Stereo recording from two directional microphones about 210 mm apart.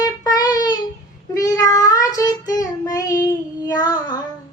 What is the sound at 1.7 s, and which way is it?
Child singing, 15° left (ahead or behind).